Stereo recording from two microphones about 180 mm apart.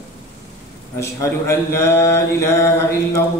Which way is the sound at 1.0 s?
15° left (ahead or behind).